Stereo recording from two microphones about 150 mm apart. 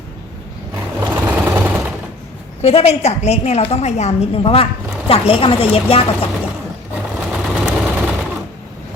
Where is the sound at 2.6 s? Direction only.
45° left (ahead or behind).